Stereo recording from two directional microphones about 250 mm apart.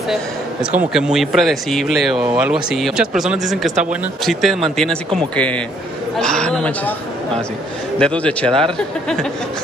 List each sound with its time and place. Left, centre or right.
0.1 s a man's voice: centre
8.0 s speech: centre